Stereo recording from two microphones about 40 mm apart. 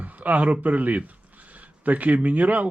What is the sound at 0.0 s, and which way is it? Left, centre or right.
Speech, right.